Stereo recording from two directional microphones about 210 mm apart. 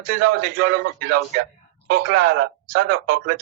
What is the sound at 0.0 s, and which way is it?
Speech, 45° right (ahead or behind).